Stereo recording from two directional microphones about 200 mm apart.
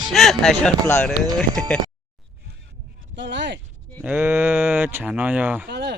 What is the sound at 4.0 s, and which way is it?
Speech, 10° right (ahead or behind).